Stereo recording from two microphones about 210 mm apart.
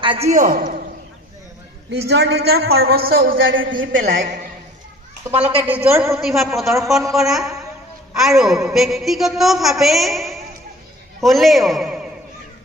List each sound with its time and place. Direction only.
0.0 s a man's voice: 25° right (ahead or behind)
1.9 s speech: 50° right (ahead or behind)
3.5 s speech: 65° right (ahead or behind)
5.6 s a woman's voice: 10° right (ahead or behind)